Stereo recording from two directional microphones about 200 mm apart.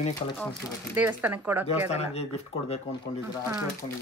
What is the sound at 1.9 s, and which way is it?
Speech, 30° left (ahead or behind).